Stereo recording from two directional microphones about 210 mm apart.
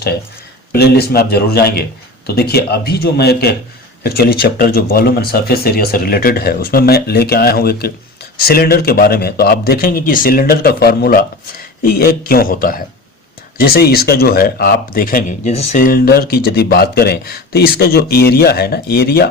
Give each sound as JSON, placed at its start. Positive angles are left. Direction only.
{"t": 0.7, "sound": "speech", "side_deg": 50}